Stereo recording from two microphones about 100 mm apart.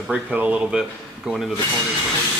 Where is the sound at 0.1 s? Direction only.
15° right (ahead or behind).